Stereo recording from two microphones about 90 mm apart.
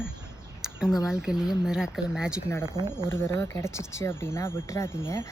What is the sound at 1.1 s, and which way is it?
Speech, 5° right (ahead or behind).